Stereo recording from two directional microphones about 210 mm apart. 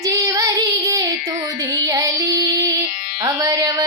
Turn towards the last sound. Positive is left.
turn(degrees=-15)  # may be behind; listen again after turning